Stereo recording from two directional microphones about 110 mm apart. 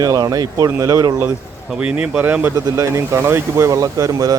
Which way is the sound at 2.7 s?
30° right (ahead or behind).